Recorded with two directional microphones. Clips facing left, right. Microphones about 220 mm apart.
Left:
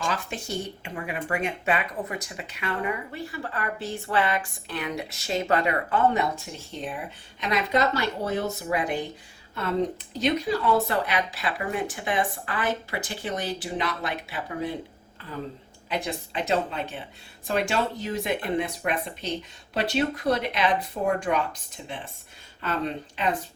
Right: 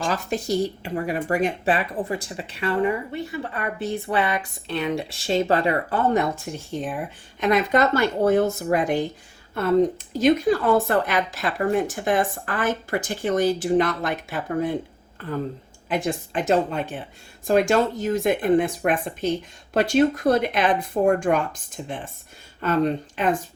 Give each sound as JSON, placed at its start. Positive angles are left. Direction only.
{"t": 0.0, "sound": "speech", "side_deg": -40}
{"t": 3.1, "sound": "speech", "side_deg": -20}
{"t": 6.3, "sound": "speech", "side_deg": -50}
{"t": 10.2, "sound": "speech", "side_deg": -50}
{"t": 15.9, "sound": "speech", "side_deg": -50}